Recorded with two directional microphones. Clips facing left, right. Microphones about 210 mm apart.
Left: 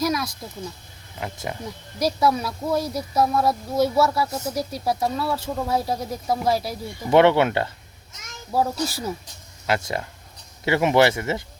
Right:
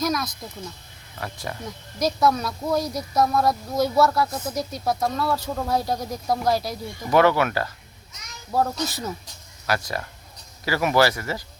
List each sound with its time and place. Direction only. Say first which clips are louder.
0.0 s a sound: left 1 dB; 10° left (ahead or behind)
1.2 s speech: left 2 dB; 20° left (ahead or behind)
7.1 s speech: left 3 dB; 25° left (ahead or behind)
8.5 s speech: left 1 dB; 5° left (ahead or behind)
9.6 s speech: left 2 dB; 25° left (ahead or behind)